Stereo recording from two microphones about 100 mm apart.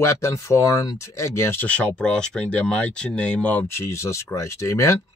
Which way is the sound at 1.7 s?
10° left (ahead or behind).